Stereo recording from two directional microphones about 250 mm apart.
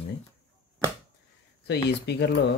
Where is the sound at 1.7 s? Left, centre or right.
Left.